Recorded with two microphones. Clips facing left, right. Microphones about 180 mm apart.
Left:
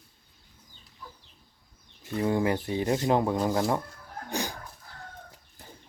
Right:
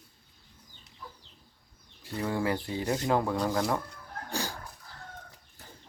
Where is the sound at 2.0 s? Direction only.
20° left (ahead or behind).